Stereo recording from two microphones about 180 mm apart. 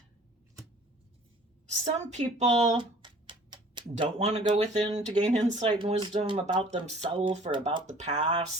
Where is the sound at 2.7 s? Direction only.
25° right (ahead or behind).